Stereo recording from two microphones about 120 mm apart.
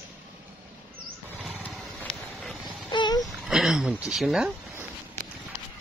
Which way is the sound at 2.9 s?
40° left (ahead or behind).